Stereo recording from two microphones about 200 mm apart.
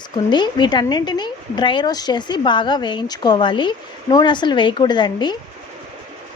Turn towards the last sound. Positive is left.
turn(degrees=20)  # may be behind; listen again after turning